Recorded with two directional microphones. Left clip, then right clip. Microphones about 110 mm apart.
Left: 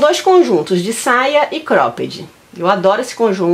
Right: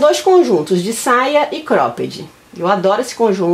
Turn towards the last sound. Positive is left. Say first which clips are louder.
# even
turn(degrees=10)  # may be behind; listen again after turning